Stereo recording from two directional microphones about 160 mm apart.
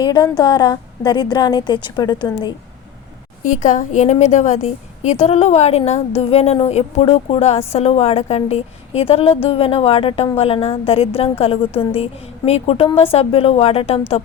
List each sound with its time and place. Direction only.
0.0 s a woman's voice: 25° left (ahead or behind)
3.4 s a woman's voice: 50° left (ahead or behind)